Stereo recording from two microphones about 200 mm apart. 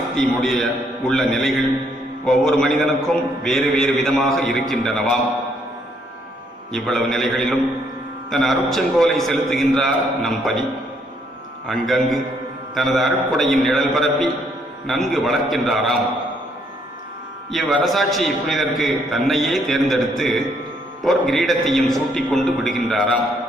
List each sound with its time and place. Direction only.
0.1 s a man's voice: centre (ahead or behind)
6.7 s a man's voice: centre (ahead or behind)
11.6 s a man's voice: centre (ahead or behind)
17.5 s a man's voice: centre (ahead or behind)